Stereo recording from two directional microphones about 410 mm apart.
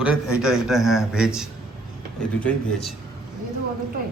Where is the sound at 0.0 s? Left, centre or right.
Centre.